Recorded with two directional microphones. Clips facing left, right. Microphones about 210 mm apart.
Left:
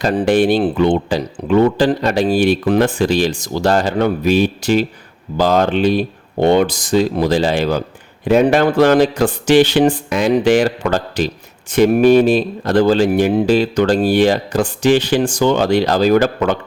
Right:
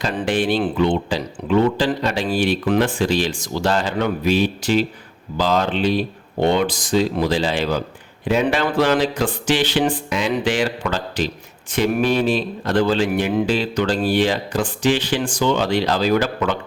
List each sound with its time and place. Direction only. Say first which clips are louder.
0.0 s a man's voice: left 7 dB; 40° left (ahead or behind)